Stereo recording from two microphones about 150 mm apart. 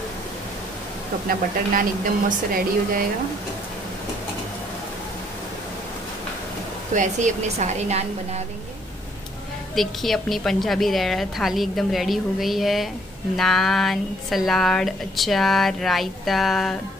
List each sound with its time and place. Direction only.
1.7 s speech: 65° right (ahead or behind)
6.9 s a woman's voice: 55° right (ahead or behind)
9.8 s a woman's voice: centre (ahead or behind)